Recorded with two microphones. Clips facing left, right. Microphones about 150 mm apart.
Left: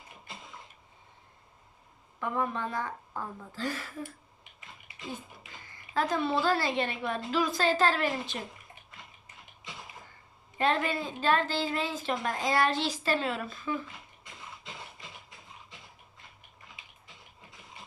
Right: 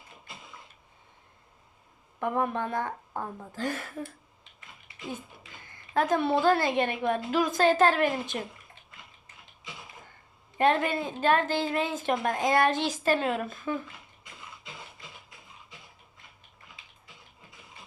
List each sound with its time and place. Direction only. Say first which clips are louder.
2.1 s a woman's voice: right 3 dB; 55° right (ahead or behind)
3.1 s a woman's voice: right 3 dB; 40° right (ahead or behind)
5.6 s a woman's voice: right 4 dB; 50° right (ahead or behind)
10.6 s a woman's voice: right 4 dB; 50° right (ahead or behind)